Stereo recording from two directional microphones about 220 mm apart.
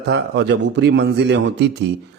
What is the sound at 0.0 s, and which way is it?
A man's voice, 50° right (ahead or behind).